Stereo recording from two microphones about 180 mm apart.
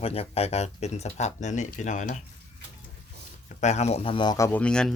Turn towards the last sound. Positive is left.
turn(degrees=5)  # may be behind; listen again after turning